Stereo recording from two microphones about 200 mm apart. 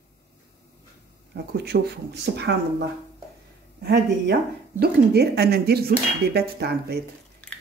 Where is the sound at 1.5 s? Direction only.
55° right (ahead or behind).